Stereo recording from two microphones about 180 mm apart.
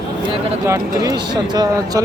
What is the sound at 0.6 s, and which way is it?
Speech, 15° right (ahead or behind).